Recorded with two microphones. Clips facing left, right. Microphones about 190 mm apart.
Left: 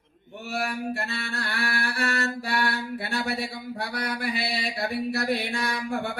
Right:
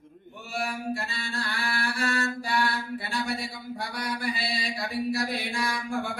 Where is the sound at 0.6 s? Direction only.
60° left (ahead or behind).